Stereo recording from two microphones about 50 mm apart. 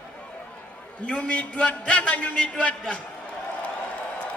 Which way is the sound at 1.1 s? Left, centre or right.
Left.